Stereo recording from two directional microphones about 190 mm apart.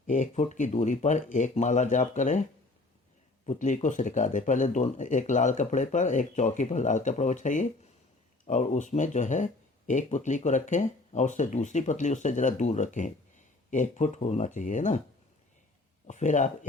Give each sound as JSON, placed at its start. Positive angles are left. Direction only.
{"t": 0.1, "sound": "speech", "side_deg": 40}
{"t": 3.4, "sound": "speech", "side_deg": 40}
{"t": 16.0, "sound": "speech", "side_deg": 40}